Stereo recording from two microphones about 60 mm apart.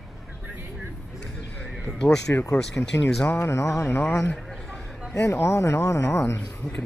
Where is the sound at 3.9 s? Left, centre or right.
Left.